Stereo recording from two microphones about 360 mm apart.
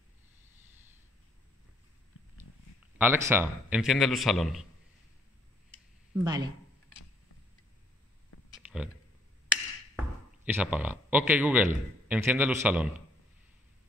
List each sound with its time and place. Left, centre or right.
3.0 s a man's voice: centre
6.1 s speech: centre
8.3 s a sound: left
10.4 s a man's voice: centre